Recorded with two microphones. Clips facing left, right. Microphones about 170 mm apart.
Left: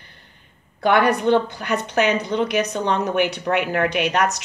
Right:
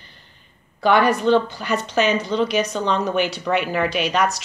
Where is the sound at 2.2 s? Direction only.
20° left (ahead or behind).